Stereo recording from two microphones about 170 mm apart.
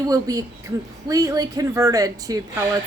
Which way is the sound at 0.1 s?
20° right (ahead or behind).